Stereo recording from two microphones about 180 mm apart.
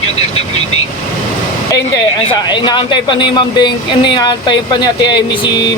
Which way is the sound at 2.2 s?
25° left (ahead or behind).